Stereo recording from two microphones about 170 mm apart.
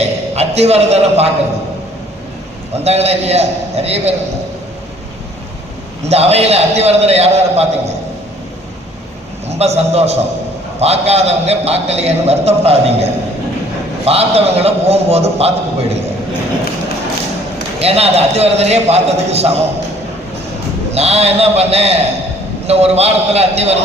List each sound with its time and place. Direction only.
0.0 s a sound: 40° right (ahead or behind)
2.7 s a man's voice: 40° right (ahead or behind)
6.1 s a man's voice: 35° right (ahead or behind)
9.5 s a man's voice: 40° right (ahead or behind)
17.7 s a man's voice: 35° right (ahead or behind)
20.9 s a man's voice: 40° right (ahead or behind)